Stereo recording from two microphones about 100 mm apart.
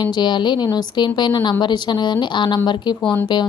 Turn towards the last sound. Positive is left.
turn(degrees=15)  # may be behind; listen again after turning